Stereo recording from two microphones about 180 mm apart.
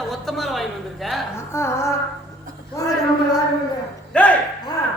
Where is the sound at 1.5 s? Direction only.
15° left (ahead or behind).